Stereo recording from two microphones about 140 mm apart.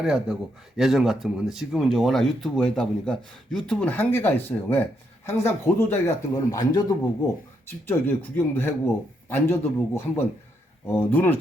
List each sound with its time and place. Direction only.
0.0 s speech: 5° right (ahead or behind); by 6.8 s 25° left (ahead or behind)
7.9 s a man's voice: 15° left (ahead or behind)